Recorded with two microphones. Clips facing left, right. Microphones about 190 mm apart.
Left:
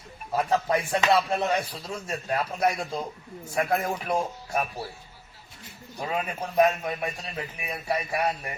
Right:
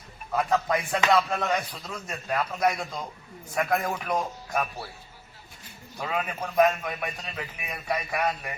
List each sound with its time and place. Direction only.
0.3 s a man's voice: 30° left (ahead or behind)